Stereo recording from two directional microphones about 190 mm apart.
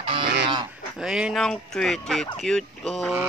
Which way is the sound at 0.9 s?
5° right (ahead or behind).